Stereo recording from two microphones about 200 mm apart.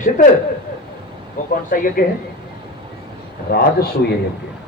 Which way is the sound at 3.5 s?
50° left (ahead or behind).